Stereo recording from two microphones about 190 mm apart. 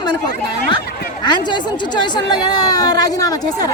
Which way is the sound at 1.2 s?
25° left (ahead or behind).